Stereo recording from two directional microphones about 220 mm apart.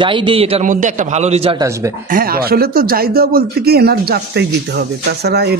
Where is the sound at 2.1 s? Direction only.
40° right (ahead or behind).